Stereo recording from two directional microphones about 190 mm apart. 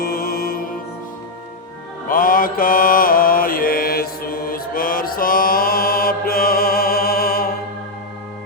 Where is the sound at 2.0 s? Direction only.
45° left (ahead or behind).